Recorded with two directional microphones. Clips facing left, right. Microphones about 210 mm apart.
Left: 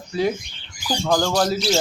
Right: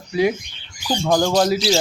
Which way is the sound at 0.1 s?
10° right (ahead or behind).